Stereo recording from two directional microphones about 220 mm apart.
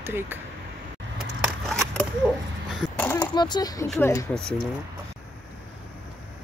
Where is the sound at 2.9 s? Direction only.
10° left (ahead or behind).